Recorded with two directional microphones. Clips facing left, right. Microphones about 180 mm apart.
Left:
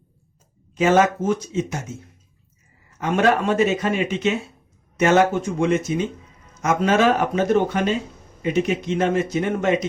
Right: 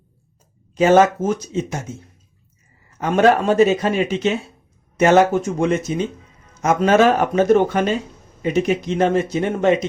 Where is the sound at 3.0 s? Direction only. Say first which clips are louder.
Right 4 dB; 35° right (ahead or behind).